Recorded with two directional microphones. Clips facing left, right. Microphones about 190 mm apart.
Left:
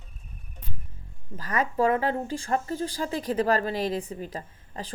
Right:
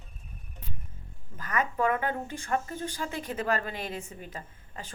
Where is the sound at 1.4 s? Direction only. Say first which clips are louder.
Left 4 dB; 35° left (ahead or behind).